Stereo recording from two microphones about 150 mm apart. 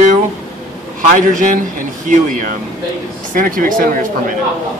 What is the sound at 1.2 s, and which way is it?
Music, 60° right (ahead or behind).